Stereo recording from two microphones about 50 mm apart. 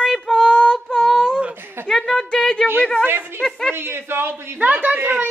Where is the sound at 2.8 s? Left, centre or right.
Left.